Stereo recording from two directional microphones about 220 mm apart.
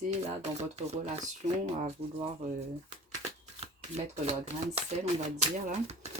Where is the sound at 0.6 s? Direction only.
30° right (ahead or behind).